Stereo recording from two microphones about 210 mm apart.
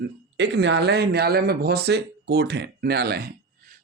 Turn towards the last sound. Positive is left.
turn(degrees=-50)  # may be behind; listen again after turning